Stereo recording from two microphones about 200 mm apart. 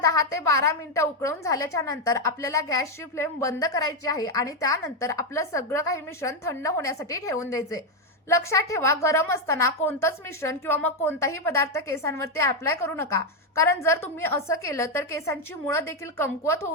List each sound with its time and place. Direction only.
0.0 s a woman's voice: 15° left (ahead or behind)